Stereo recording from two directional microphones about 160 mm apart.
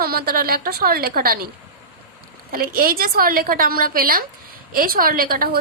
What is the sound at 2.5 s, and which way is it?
A woman's voice, 65° right (ahead or behind).